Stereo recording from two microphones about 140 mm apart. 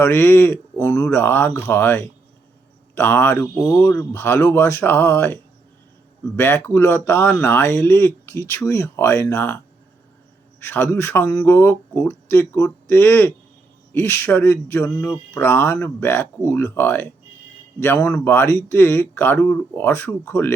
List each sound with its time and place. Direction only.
0.0 s speech: 15° left (ahead or behind)
10.6 s speech: 15° left (ahead or behind)